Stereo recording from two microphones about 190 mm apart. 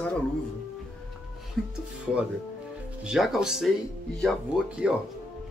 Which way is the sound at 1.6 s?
Centre (ahead or behind).